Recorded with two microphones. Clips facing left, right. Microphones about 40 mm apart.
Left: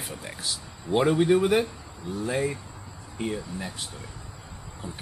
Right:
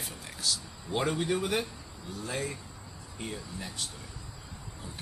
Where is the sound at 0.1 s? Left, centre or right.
Left.